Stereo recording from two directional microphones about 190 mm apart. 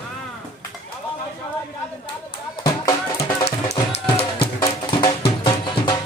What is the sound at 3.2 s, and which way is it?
Music, 35° left (ahead or behind).